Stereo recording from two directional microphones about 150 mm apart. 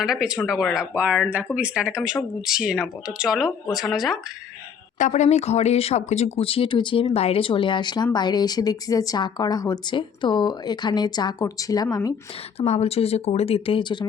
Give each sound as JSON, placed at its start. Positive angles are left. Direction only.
{"t": 0.0, "sound": "speech", "side_deg": -5}
{"t": 4.9, "sound": "speech", "side_deg": 55}
{"t": 12.5, "sound": "speech", "side_deg": 45}